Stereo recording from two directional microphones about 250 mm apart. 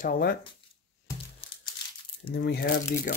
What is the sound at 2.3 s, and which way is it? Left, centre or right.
Speech, left.